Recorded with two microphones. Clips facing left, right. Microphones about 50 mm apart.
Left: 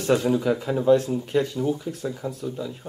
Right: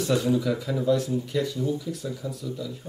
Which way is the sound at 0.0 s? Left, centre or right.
Left.